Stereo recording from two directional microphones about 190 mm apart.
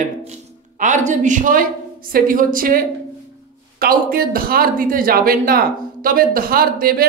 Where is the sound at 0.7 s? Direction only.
40° right (ahead or behind).